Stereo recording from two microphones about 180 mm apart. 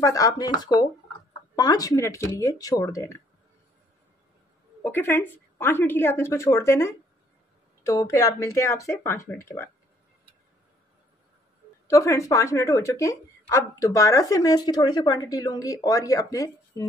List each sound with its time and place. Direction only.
0.0 s a woman's voice: 20° left (ahead or behind)
4.8 s a woman's voice: 10° left (ahead or behind)
11.9 s a woman's voice: 15° left (ahead or behind)